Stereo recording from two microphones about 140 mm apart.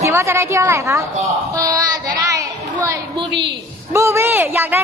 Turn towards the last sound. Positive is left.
turn(degrees=-15)  # may be behind; listen again after turning